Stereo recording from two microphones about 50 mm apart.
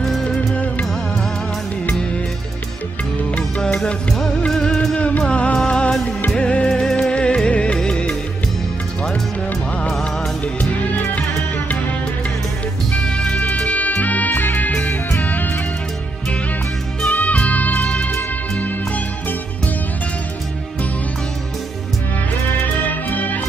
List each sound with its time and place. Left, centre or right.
3.3 s music: left
4.5 s music: centre
5.3 s music: left
10.4 s music: left
13.0 s music: centre
13.6 s music: left
17.1 s music: left
22.8 s music: left